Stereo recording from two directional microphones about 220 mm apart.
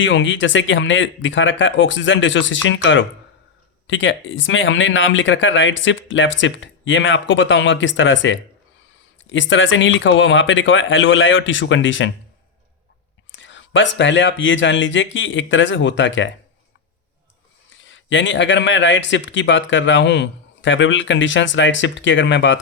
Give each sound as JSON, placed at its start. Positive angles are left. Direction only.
{"t": 0.0, "sound": "a man's voice", "side_deg": 60}
{"t": 13.3, "sound": "a man's voice", "side_deg": 55}
{"t": 17.7, "sound": "a man's voice", "side_deg": 60}